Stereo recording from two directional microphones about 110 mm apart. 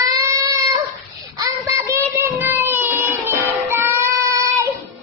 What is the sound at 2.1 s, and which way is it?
Child singing, 15° right (ahead or behind).